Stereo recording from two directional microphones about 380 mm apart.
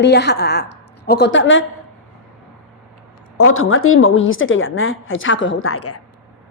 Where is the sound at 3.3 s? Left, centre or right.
Left.